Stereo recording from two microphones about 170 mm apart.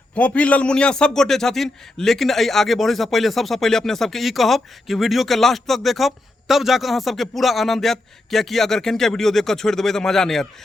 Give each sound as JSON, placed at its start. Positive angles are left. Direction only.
{"t": 0.1, "sound": "a man's voice", "side_deg": 10}